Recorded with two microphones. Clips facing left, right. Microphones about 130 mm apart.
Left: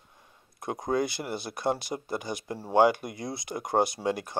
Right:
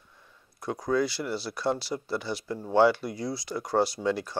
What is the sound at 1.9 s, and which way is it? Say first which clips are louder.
Speech: right 1 dB; 35° left (ahead or behind).